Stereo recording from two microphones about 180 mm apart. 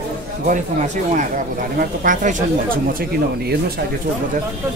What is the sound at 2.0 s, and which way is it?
Speech, 45° right (ahead or behind).